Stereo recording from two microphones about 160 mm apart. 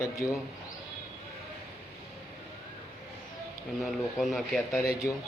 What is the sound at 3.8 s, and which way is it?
Speech, centre (ahead or behind).